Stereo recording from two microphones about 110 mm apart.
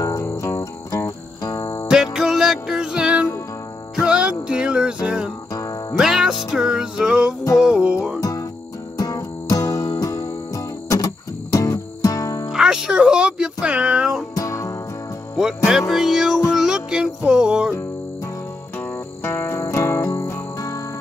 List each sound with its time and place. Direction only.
0.0 s music: 25° left (ahead or behind)
1.9 s music: 5° right (ahead or behind)
5.5 s music: 30° left (ahead or behind)
5.9 s music: 5° right (ahead or behind)
8.2 s music: 30° left (ahead or behind)
12.4 s music: 5° right (ahead or behind)
14.3 s music: 30° left (ahead or behind)
15.3 s music: 5° right (ahead or behind)
18.8 s music: 20° left (ahead or behind)